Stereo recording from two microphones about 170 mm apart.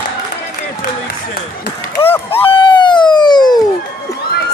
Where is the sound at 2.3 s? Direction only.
35° left (ahead or behind).